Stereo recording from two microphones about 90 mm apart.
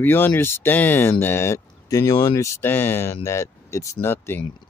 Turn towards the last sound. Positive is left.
turn(degrees=25)  # may be behind; listen again after turning